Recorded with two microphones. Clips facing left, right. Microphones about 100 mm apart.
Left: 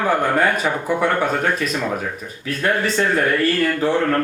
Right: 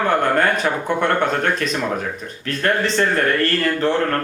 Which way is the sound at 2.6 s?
10° left (ahead or behind).